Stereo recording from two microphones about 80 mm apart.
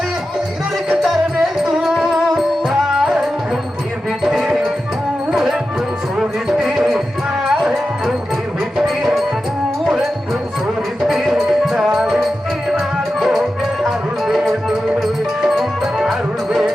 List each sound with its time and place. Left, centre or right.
0.9 s music: centre